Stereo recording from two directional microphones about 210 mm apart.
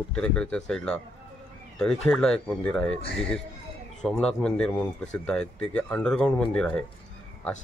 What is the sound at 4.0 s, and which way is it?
Speech, centre (ahead or behind).